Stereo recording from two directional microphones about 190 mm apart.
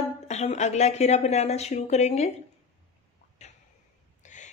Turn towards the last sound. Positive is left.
turn(degrees=40)  # may be behind; listen again after turning